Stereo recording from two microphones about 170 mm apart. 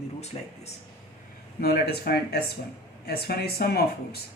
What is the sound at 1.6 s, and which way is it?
Speech, 65° left (ahead or behind).